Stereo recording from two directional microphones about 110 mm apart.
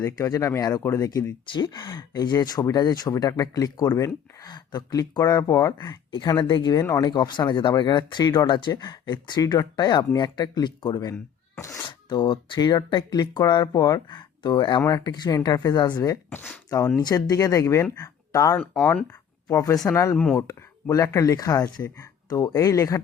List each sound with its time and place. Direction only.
0.0 s speech: 25° left (ahead or behind)
1.5 s speech: 45° left (ahead or behind); by 23.0 s 30° left (ahead or behind)